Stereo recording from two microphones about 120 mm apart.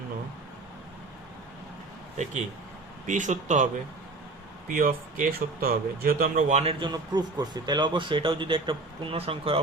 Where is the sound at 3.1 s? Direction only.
90° right.